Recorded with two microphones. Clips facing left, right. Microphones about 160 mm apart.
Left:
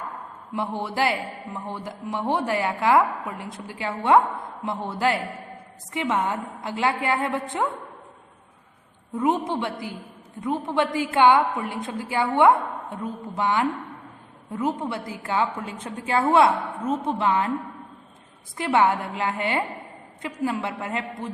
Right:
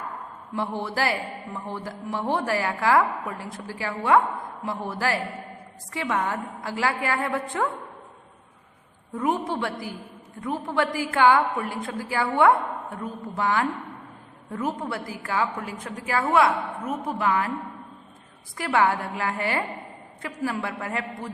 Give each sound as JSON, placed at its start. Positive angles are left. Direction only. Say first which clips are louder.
{"t": 0.5, "sound": "a man's voice", "louder": "left 1 dB", "side_deg": 15}
{"t": 9.1, "sound": "a man's voice", "louder": "left 2 dB", "side_deg": 20}
{"t": 18.5, "sound": "a man's voice", "louder": "left 2 dB", "side_deg": 20}